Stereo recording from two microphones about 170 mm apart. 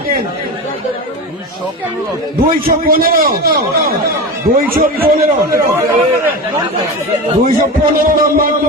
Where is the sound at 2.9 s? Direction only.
60° right (ahead or behind).